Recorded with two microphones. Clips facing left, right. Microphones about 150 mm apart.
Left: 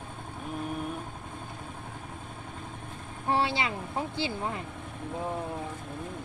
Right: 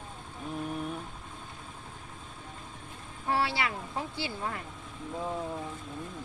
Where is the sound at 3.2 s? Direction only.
20° left (ahead or behind).